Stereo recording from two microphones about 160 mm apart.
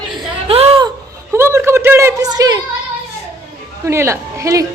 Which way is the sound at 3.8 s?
15° right (ahead or behind).